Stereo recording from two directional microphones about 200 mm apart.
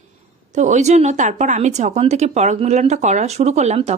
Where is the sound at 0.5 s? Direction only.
35° right (ahead or behind).